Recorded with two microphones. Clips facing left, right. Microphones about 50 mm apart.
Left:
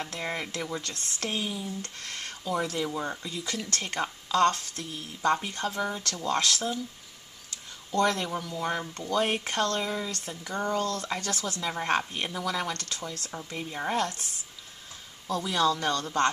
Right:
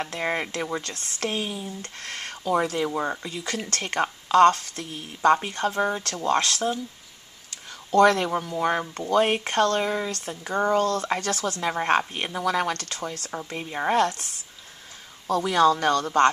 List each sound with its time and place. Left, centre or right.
0.0 s speech: right
2.0 s speech: right
3.4 s speech: right
7.9 s speech: right
8.3 s speech: right
11.7 s speech: right
13.3 s speech: right
13.9 s speech: right
15.2 s speech: right